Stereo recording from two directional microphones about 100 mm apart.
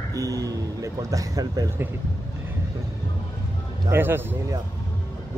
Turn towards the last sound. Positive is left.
turn(degrees=-20)  # may be behind; listen again after turning